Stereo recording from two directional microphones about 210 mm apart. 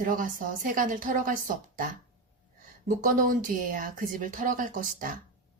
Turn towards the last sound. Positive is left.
turn(degrees=-40)  # may be behind; listen again after turning